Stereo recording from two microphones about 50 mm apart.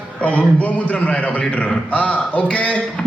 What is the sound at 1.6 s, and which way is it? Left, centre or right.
A man's voice, left.